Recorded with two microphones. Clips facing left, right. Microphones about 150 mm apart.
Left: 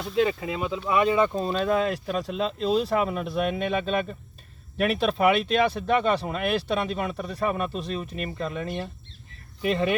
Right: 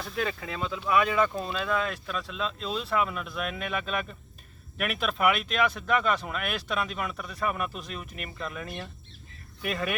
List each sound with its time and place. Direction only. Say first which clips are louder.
0.0 s speech: left 8 dB; 20° left (ahead or behind)
1.4 s speech: left 6 dB; 40° left (ahead or behind)